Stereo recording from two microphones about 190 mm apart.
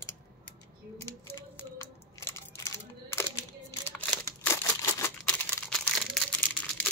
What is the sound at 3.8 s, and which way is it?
Typewriter, 10° left (ahead or behind).